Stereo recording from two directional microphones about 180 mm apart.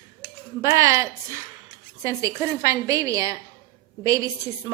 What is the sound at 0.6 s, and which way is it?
A woman's voice, 15° right (ahead or behind).